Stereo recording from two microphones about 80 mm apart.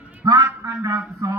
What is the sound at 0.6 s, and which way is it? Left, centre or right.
Speech, right.